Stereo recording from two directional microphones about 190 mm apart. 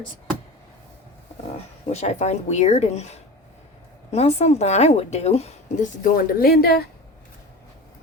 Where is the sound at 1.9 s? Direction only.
35° left (ahead or behind); by 6.8 s 55° left (ahead or behind).